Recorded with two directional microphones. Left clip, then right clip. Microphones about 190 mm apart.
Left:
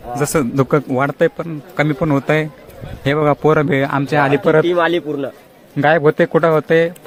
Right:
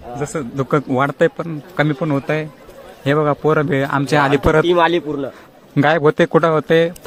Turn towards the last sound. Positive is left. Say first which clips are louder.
# left 1 dB
turn(degrees=-10)  # may be behind; listen again after turning